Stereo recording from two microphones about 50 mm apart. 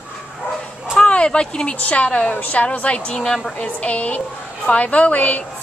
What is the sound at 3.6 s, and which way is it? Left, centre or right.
A woman's voice, left.